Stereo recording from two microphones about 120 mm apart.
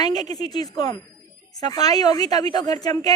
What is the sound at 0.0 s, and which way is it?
A woman's voice, 35° left (ahead or behind).